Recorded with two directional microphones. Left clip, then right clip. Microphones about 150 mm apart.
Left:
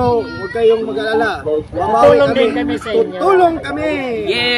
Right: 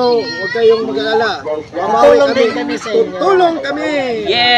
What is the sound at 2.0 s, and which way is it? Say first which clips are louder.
Speech: right 1 dB; 20° left (ahead or behind).